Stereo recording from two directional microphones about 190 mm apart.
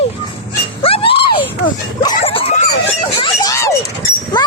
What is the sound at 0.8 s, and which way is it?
Screaming, 30° left (ahead or behind).